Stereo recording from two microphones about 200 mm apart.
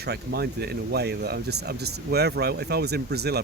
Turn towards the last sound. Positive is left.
turn(degrees=-55)  # may be behind; listen again after turning